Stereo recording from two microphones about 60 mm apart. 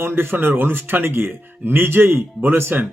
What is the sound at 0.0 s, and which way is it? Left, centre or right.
Speech, right.